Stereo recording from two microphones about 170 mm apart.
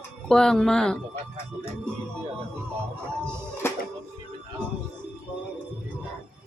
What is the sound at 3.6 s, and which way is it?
Music, 15° left (ahead or behind).